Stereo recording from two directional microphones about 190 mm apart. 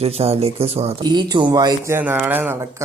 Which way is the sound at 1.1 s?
20° right (ahead or behind).